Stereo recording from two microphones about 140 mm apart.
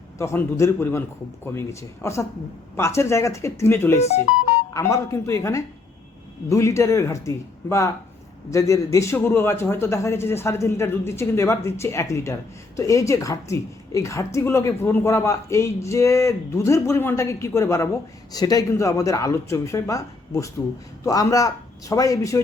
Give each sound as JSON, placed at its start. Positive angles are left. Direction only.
{"t": 0.2, "sound": "a man's voice", "side_deg": 20}
{"t": 4.0, "sound": "speech", "side_deg": 50}
{"t": 4.7, "sound": "a man's voice", "side_deg": 20}